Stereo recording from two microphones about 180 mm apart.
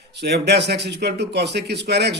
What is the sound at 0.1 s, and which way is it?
Speech, 65° right (ahead or behind).